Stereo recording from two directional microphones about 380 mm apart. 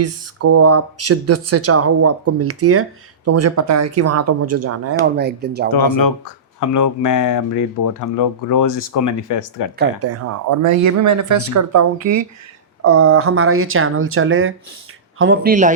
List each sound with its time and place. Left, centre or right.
0.0 s speech: right
5.1 s speech: right
5.7 s speech: left
10.0 s speech: right
12.8 s speech: right